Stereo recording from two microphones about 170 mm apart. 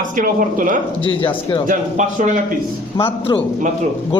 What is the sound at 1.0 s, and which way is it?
Speech, 30° left (ahead or behind).